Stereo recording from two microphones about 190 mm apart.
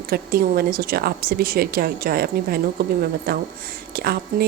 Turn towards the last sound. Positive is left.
turn(degrees=-55)  # may be behind; listen again after turning